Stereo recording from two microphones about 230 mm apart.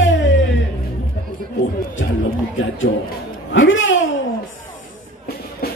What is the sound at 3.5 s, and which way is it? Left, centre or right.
Speech, left.